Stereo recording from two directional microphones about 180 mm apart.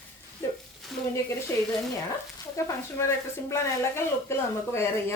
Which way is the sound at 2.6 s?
15° left (ahead or behind).